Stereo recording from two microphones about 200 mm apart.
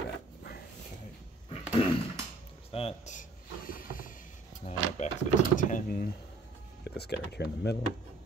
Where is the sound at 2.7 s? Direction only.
35° left (ahead or behind).